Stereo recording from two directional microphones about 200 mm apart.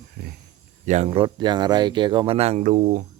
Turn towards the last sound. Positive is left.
turn(degrees=-45)  # may be behind; listen again after turning